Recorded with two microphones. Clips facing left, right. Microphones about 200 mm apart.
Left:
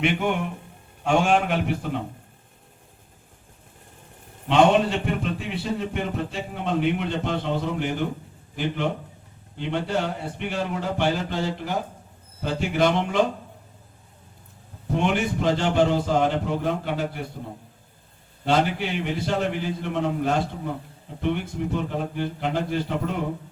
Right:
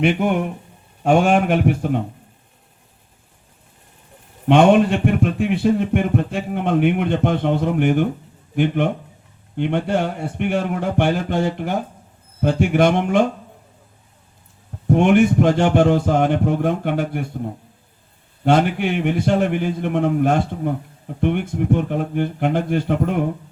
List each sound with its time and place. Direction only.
1.0 s a man's voice: 50° right (ahead or behind)
4.4 s speech: 55° right (ahead or behind)
14.8 s a man's voice: 55° right (ahead or behind)
18.4 s speech: 55° right (ahead or behind)